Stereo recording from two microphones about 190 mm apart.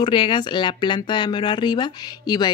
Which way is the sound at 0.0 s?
25° left (ahead or behind).